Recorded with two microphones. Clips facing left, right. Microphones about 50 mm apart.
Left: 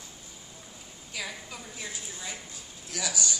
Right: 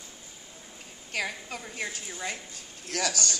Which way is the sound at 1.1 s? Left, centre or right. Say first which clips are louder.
Right 5 dB; right.